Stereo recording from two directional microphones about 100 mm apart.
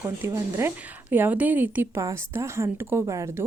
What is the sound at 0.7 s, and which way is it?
A woman's voice, 15° right (ahead or behind).